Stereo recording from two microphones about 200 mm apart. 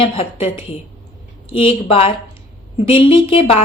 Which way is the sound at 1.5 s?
25° left (ahead or behind).